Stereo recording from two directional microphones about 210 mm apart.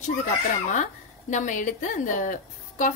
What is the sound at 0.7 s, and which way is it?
A woman's voice, 35° left (ahead or behind).